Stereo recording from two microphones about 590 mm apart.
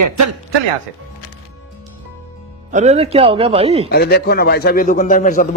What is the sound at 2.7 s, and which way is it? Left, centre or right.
Speech, centre.